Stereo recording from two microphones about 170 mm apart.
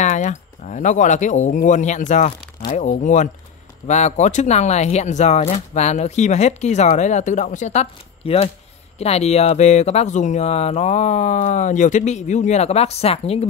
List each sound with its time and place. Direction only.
0.0 s speech: 45° left (ahead or behind)